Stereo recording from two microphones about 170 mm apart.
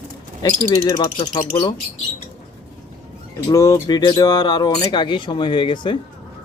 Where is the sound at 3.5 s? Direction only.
20° left (ahead or behind).